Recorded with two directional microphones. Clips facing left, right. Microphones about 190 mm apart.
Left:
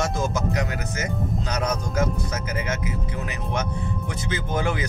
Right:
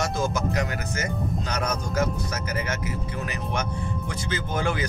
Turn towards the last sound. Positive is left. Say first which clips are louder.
# left 1 dB
turn(degrees=20)  # may be behind; listen again after turning